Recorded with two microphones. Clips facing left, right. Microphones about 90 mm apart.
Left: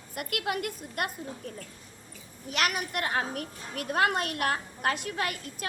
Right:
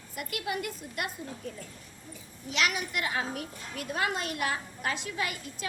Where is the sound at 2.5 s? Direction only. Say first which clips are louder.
Left 1 dB; 50° left (ahead or behind).